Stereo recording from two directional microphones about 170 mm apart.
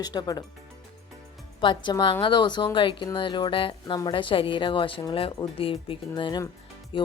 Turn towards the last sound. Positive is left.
turn(degrees=30)  # may be behind; listen again after turning